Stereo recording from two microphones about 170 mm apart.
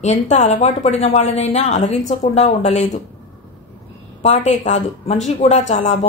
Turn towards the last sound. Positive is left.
turn(degrees=45)  # may be behind; listen again after turning